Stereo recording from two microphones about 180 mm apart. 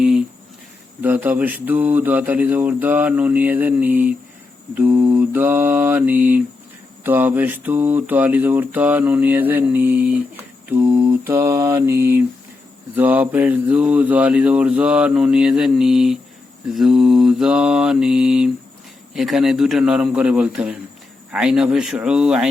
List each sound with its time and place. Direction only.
1.0 s mantra: 10° right (ahead or behind)